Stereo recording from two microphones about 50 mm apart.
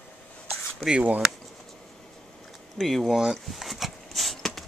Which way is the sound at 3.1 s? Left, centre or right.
Centre.